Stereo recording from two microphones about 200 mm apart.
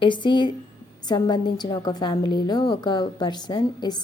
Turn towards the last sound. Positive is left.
turn(degrees=20)  # may be behind; listen again after turning